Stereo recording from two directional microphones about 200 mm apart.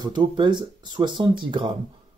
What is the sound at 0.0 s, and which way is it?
Speech, 20° right (ahead or behind).